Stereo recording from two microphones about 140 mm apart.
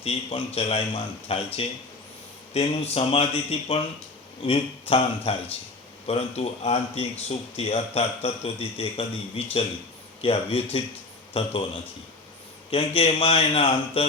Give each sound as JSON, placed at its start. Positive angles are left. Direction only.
{"t": 0.0, "sound": "a man's voice", "side_deg": 45}
{"t": 12.7, "sound": "a man's voice", "side_deg": 40}